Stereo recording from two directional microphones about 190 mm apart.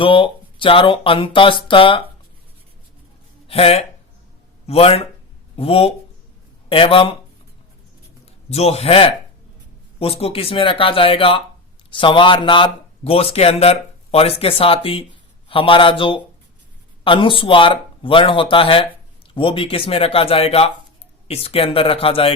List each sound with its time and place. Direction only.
0.0 s a man's voice: 25° left (ahead or behind)
3.4 s a man's voice: 30° left (ahead or behind)
8.4 s a man's voice: 35° left (ahead or behind)